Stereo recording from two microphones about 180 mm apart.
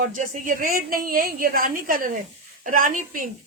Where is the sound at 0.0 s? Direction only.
45° right (ahead or behind).